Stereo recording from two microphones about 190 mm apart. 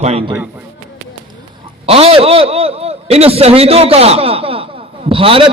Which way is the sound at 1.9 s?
30° right (ahead or behind).